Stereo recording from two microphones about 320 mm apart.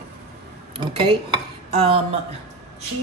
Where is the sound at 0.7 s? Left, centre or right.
Centre.